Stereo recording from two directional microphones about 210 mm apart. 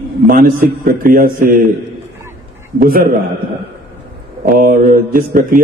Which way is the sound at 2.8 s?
45° right (ahead or behind).